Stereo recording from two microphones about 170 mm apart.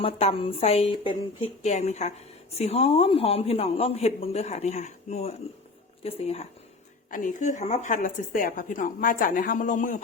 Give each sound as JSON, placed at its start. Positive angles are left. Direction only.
{"t": 0.0, "sound": "speech", "side_deg": 35}
{"t": 1.6, "sound": "speech", "side_deg": 40}
{"t": 7.1, "sound": "a woman's voice", "side_deg": 50}